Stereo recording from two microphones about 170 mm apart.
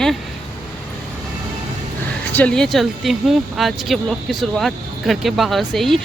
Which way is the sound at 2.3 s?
5° left (ahead or behind).